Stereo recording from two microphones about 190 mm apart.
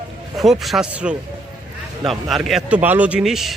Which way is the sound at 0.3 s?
Centre (ahead or behind).